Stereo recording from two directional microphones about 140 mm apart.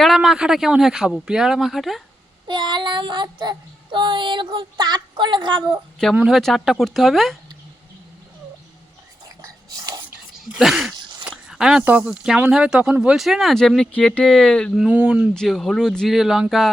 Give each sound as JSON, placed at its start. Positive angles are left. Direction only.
{"t": 0.0, "sound": "speech", "side_deg": 0}
{"t": 2.5, "sound": "a sound", "side_deg": -35}
{"t": 6.1, "sound": "speech", "side_deg": -5}
{"t": 9.4, "sound": "a sound", "side_deg": -25}
{"t": 10.6, "sound": "speech", "side_deg": -5}
{"t": 11.2, "sound": "a sound", "side_deg": -5}
{"t": 11.8, "sound": "speech", "side_deg": -15}
{"t": 14.8, "sound": "speech", "side_deg": -10}
{"t": 15.4, "sound": "speech", "side_deg": 0}